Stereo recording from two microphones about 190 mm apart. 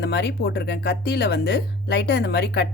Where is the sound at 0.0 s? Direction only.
60° left (ahead or behind).